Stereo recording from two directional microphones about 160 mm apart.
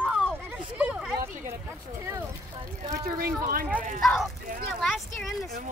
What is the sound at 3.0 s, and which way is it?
Speech, 65° right (ahead or behind).